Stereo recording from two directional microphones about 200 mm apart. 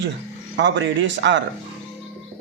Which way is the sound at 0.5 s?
60° right (ahead or behind).